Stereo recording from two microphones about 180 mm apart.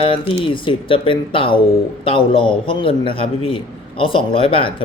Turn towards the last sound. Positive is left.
turn(degrees=30)  # may be behind; listen again after turning